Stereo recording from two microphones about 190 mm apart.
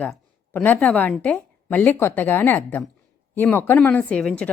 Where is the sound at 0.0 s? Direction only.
10° left (ahead or behind).